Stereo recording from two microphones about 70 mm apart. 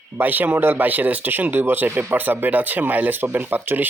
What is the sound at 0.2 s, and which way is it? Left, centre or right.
Speech, right.